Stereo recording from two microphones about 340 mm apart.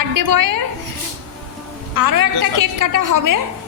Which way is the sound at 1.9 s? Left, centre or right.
Right.